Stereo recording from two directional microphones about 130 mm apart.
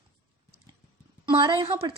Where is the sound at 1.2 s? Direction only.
40° right (ahead or behind).